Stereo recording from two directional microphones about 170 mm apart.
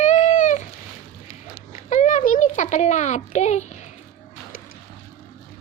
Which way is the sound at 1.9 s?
45° left (ahead or behind).